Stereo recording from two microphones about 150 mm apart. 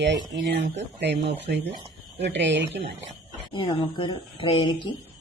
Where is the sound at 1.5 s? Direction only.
90° right.